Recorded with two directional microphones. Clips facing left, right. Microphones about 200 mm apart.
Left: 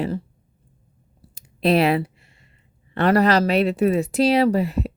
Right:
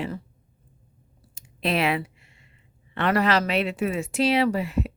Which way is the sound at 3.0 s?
40° left (ahead or behind).